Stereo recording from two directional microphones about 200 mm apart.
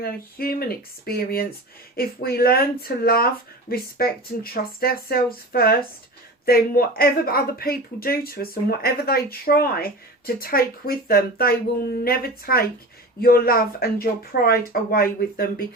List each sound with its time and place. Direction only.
0.0 s speech: 50° left (ahead or behind)